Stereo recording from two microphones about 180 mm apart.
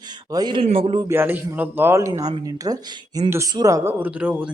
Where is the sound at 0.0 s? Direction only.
20° right (ahead or behind).